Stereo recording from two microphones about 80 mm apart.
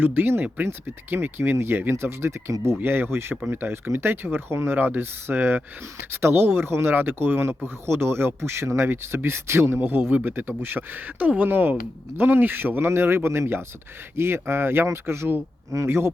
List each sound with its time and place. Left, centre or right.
0.0 s speech: right